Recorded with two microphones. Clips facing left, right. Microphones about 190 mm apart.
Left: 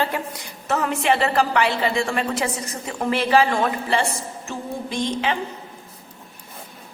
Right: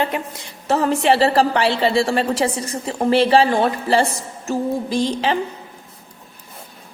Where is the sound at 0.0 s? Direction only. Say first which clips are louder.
Right 2 dB; 25° right (ahead or behind).